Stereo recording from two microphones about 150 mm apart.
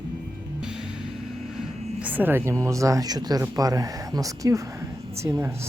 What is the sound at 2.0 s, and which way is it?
Speech, 10° right (ahead or behind).